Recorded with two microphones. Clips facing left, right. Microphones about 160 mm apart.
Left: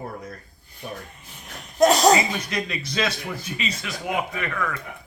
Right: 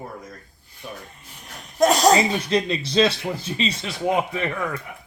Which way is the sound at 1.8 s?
Centre (ahead or behind).